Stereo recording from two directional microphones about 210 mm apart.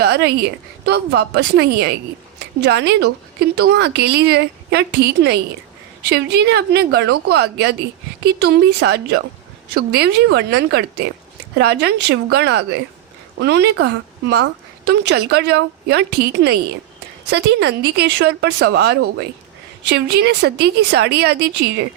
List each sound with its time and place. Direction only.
0.0 s a woman's voice: 55° right (ahead or behind)